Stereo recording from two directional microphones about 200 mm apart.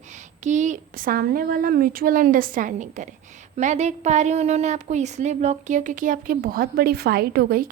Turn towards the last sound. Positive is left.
turn(degrees=-50)  # may be behind; listen again after turning